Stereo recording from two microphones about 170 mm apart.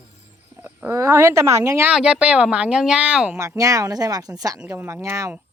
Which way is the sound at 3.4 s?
20° right (ahead or behind).